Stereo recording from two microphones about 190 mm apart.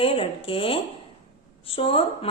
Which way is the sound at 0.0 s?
30° left (ahead or behind).